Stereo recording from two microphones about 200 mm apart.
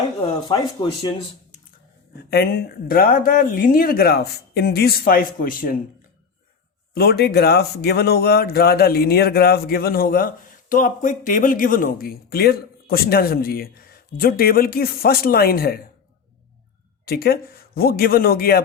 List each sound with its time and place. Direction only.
0.4 s speech: 20° left (ahead or behind)
2.3 s speech: 50° left (ahead or behind)
6.9 s speech: 50° left (ahead or behind)
17.1 s speech: 50° left (ahead or behind)